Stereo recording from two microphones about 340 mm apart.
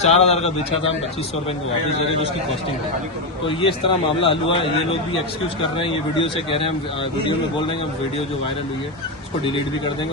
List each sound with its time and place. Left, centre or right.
0.0 s speech: centre
3.6 s speech: centre